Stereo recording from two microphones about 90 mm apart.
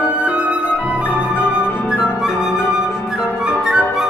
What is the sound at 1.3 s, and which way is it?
Flute, 20° left (ahead or behind).